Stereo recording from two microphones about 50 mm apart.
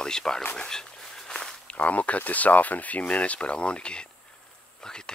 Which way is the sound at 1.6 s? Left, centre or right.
Left.